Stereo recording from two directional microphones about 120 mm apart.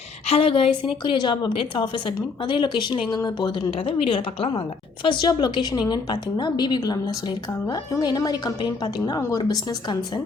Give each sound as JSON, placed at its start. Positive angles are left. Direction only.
{"t": 0.3, "sound": "a woman's voice", "side_deg": 50}